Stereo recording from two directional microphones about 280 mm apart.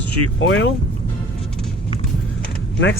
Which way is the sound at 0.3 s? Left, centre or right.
Left.